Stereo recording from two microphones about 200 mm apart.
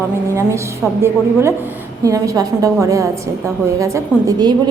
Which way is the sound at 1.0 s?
10° right (ahead or behind).